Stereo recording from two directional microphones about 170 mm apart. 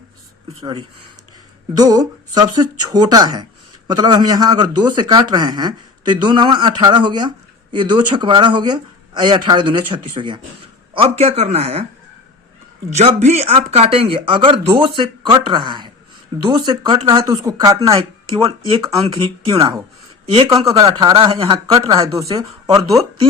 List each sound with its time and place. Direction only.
0.6 s speech: 30° right (ahead or behind)
12.9 s speech: 40° right (ahead or behind)
19.5 s speech: 20° right (ahead or behind)
20.7 s speech: 20° right (ahead or behind)